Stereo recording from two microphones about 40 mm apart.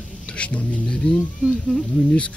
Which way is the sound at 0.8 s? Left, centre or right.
Left.